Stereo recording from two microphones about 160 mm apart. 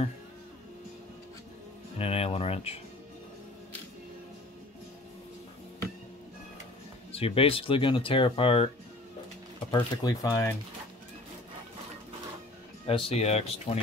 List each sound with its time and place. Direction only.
2.0 s a sound: 40° left (ahead or behind)
7.1 s speech: 35° left (ahead or behind)
9.7 s speech: 25° left (ahead or behind)
12.8 s speech: 35° left (ahead or behind)